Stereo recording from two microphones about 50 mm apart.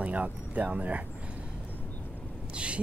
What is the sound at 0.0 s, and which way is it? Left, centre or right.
Speech, right.